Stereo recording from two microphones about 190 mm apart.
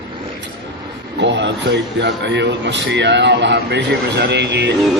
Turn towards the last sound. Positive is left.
turn(degrees=-65)  # may be behind; listen again after turning